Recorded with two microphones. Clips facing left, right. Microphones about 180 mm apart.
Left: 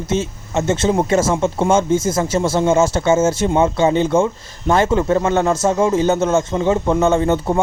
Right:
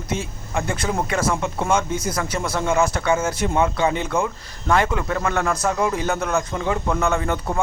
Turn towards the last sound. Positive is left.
turn(degrees=25)  # may be behind; listen again after turning